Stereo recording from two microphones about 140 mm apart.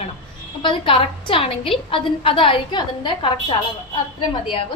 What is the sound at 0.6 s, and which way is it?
A woman's voice, 40° left (ahead or behind).